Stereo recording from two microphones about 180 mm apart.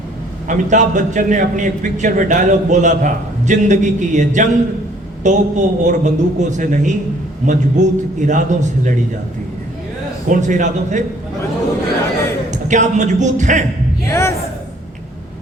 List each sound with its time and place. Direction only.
0.4 s a man's voice: 45° right (ahead or behind)
10.2 s a man's voice: 45° right (ahead or behind)
12.5 s speech: 40° right (ahead or behind)
14.1 s speech: 15° left (ahead or behind)